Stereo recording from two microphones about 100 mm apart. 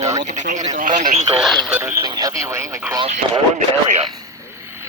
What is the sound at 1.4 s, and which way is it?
Speech, centre (ahead or behind).